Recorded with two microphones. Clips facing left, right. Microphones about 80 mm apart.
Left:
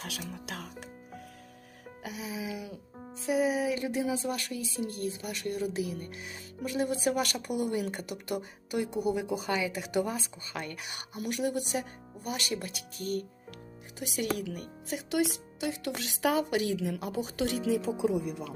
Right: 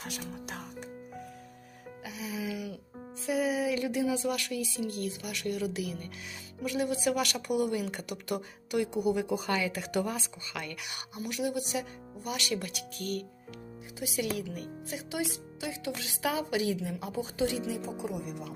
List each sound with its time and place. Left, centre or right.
2.1 s speech: left
10.4 s speech: left
11.2 s speech: left
14.0 s speech: left
15.1 s speech: left
16.7 s speech: left